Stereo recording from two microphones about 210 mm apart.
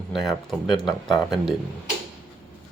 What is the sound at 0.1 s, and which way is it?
Speech, centre (ahead or behind).